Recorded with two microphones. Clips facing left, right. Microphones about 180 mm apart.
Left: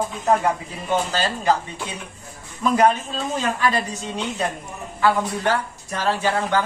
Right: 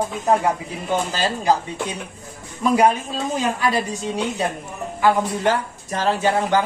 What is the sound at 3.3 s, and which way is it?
A woman's voice, 10° right (ahead or behind).